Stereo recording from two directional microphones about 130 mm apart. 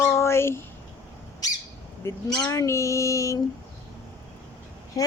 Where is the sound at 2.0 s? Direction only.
25° left (ahead or behind).